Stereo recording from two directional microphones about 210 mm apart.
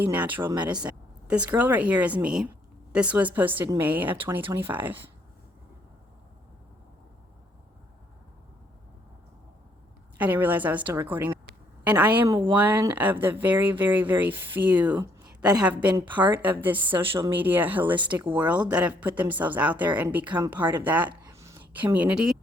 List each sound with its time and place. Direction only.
0.0 s speech: 10° right (ahead or behind)
10.2 s speech: 10° right (ahead or behind)
17.9 s speech: 20° right (ahead or behind)
18.3 s speech: 10° right (ahead or behind)
21.1 s a sound: 15° right (ahead or behind)